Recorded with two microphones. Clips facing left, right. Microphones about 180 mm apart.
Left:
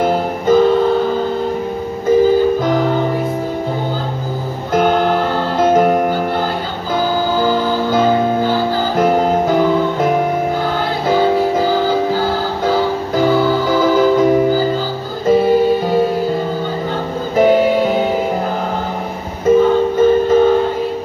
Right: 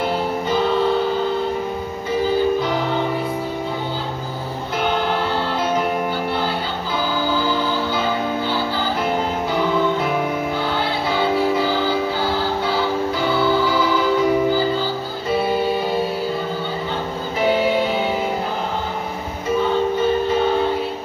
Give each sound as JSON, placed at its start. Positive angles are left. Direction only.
{"t": 0.0, "sound": "music", "side_deg": 45}
{"t": 2.0, "sound": "music", "side_deg": 45}
{"t": 4.7, "sound": "music", "side_deg": 45}
{"t": 7.3, "sound": "music", "side_deg": 45}
{"t": 17.4, "sound": "music", "side_deg": 45}
{"t": 20.0, "sound": "music", "side_deg": 45}